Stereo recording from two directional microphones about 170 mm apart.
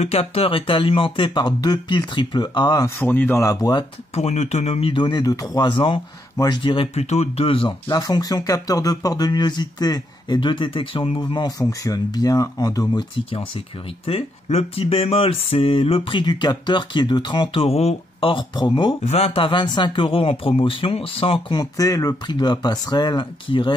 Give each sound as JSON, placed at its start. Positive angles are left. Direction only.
{"t": 0.0, "sound": "speech", "side_deg": 35}
{"t": 4.1, "sound": "speech", "side_deg": 40}
{"t": 14.0, "sound": "speech", "side_deg": 35}